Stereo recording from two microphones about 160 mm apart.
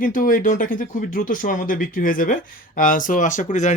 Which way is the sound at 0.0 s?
60° left (ahead or behind).